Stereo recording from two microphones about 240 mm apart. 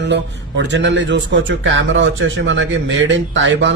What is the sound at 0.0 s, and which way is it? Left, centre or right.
A man's voice, right.